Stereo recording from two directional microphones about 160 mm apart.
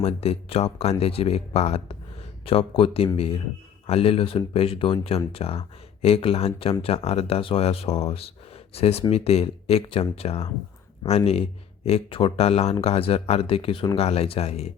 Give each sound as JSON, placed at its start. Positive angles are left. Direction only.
{"t": 0.0, "sound": "speech", "side_deg": 40}